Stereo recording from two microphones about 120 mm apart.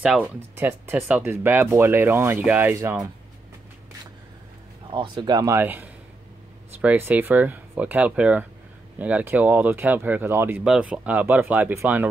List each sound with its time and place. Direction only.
0.0 s speech: 5° right (ahead or behind)
0.6 s speech: 20° right (ahead or behind)
4.9 s speech: 40° right (ahead or behind); by 12.1 s 20° right (ahead or behind)